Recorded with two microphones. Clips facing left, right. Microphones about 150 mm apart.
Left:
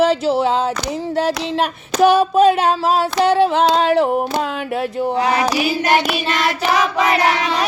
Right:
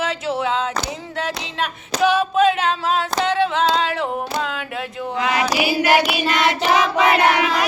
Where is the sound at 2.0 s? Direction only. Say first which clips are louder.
Left 4 dB; 40° left (ahead or behind).